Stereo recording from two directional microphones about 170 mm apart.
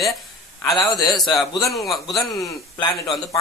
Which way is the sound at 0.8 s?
25° left (ahead or behind).